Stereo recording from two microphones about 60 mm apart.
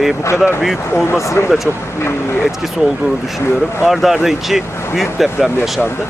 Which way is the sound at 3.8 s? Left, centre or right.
Centre.